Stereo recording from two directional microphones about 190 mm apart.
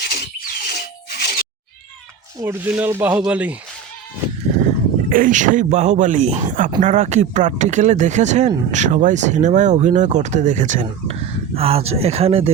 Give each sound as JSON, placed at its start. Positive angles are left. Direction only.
{"t": 0.1, "sound": "a sound", "side_deg": 50}
{"t": 2.4, "sound": "speech", "side_deg": -10}
{"t": 5.0, "sound": "speech", "side_deg": -45}